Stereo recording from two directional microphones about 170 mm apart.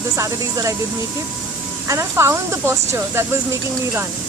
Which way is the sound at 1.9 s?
15° right (ahead or behind).